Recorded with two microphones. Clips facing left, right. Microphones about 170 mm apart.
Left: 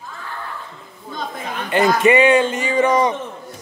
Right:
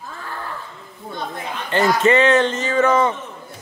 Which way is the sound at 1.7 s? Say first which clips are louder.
Left 2 dB; 15° left (ahead or behind).